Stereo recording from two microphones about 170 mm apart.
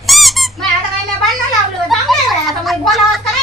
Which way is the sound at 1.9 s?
Centre (ahead or behind).